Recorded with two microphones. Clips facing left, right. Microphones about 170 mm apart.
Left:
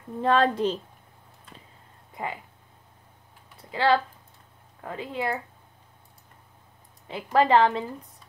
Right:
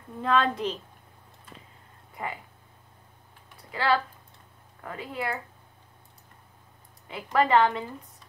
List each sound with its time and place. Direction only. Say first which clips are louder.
0.2 s speech: left 3 dB; 35° left (ahead or behind)
3.7 s speech: left 3 dB; 25° left (ahead or behind)
7.1 s speech: left 3 dB; 30° left (ahead or behind)